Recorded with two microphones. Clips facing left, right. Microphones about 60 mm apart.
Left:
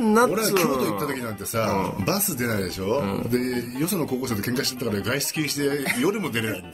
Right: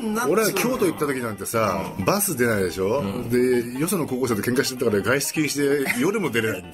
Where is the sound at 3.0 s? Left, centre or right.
Left.